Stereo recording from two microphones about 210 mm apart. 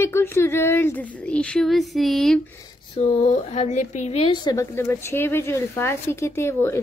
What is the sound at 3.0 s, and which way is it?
A woman's voice, 35° left (ahead or behind).